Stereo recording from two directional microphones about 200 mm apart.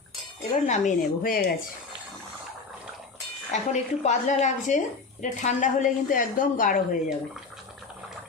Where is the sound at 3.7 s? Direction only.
35° left (ahead or behind).